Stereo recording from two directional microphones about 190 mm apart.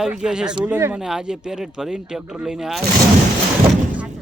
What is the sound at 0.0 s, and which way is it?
Speech, 5° right (ahead or behind).